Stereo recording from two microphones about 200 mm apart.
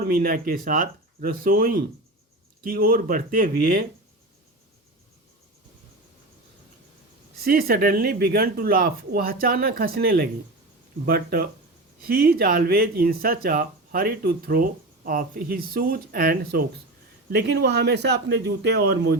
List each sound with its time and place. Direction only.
0.0 s speech: 45° right (ahead or behind)
7.4 s speech: 50° right (ahead or behind)